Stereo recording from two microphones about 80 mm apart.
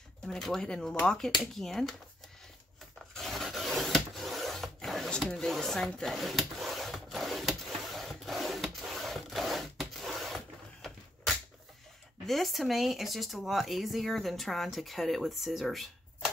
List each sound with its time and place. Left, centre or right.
0.3 s speech: centre
3.2 s filing: centre
5.1 s a sound: centre
12.3 s speech: centre